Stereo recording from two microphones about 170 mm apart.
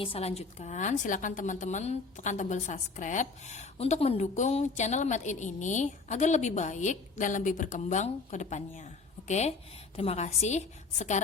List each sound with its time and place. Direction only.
0.0 s a woman's voice: 35° left (ahead or behind)